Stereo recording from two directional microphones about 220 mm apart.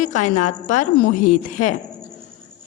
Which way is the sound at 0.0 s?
35° left (ahead or behind).